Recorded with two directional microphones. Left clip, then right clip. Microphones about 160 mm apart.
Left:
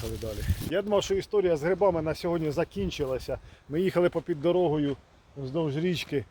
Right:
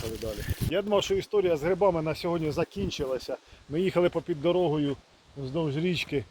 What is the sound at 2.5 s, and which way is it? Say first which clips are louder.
Speech: even; 40° left (ahead or behind).